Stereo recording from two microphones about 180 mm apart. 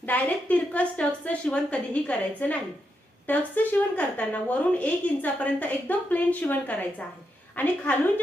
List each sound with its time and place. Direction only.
0.0 s a woman's voice: 10° left (ahead or behind)